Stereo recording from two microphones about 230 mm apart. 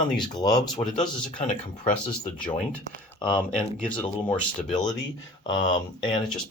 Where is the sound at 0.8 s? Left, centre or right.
Left.